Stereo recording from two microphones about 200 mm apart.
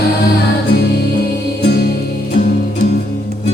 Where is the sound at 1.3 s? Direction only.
50° left (ahead or behind).